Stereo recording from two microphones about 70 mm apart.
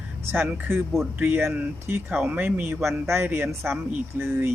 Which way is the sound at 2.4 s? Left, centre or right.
Right.